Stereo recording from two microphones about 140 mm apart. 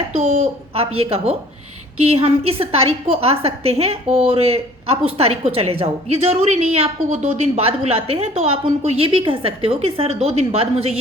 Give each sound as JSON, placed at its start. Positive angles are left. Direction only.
{"t": 0.1, "sound": "a woman's voice", "side_deg": -45}